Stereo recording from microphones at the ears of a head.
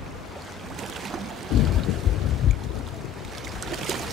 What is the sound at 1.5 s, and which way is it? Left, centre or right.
Boat, left.